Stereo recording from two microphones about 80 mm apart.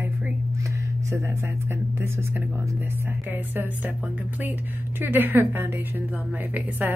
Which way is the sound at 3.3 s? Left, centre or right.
Right.